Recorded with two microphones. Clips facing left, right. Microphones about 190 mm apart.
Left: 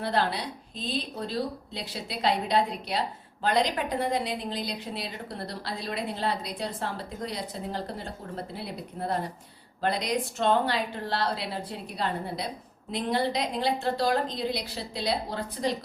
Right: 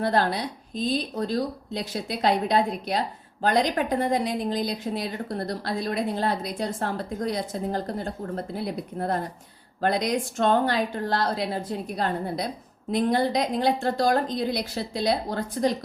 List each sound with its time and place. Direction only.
0.0 s a woman's voice: 45° right (ahead or behind)
9.8 s a woman's voice: 50° right (ahead or behind)